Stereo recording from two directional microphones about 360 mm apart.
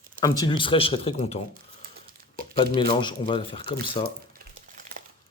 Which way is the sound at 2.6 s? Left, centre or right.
Centre.